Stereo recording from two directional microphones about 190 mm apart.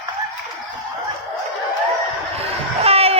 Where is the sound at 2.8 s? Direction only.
30° right (ahead or behind).